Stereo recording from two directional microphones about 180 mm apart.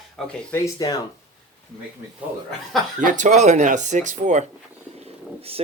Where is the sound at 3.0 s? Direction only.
45° right (ahead or behind).